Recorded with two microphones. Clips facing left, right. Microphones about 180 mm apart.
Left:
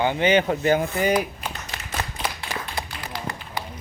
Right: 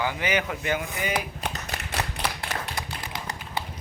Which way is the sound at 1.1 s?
65° right (ahead or behind).